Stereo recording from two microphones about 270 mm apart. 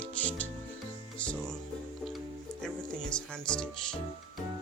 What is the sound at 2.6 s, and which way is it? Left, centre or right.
Music, centre.